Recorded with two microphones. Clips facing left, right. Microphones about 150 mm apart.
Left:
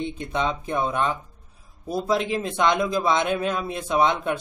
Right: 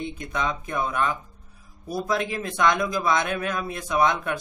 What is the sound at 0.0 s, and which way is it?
Speech, 25° left (ahead or behind).